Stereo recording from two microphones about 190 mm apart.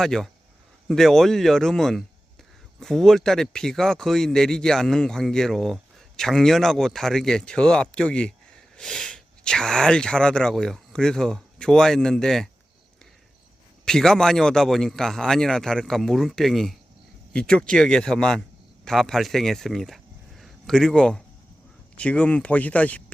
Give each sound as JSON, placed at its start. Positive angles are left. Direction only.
{"t": 0.0, "sound": "speech", "side_deg": 0}
{"t": 13.8, "sound": "speech", "side_deg": 5}